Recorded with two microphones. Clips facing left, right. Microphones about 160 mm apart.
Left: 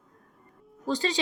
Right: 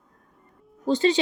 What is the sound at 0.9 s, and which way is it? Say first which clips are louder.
Speech: right 7 dB; 25° right (ahead or behind).